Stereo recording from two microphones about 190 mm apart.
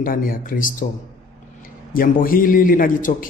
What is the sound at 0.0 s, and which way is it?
Speech, 50° left (ahead or behind).